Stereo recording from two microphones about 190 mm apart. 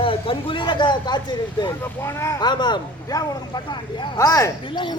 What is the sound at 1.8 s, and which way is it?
Speech, 15° left (ahead or behind).